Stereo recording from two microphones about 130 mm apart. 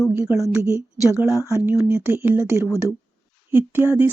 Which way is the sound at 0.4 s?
25° right (ahead or behind).